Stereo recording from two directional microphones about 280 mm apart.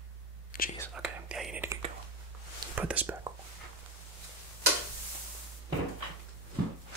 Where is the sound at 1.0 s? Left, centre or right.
Centre.